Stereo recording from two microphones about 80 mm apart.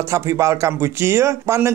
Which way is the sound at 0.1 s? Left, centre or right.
Right.